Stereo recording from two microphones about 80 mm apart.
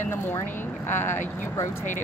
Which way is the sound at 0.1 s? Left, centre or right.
Left.